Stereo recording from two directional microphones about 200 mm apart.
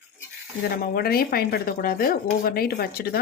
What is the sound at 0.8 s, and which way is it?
Speech, 50° left (ahead or behind).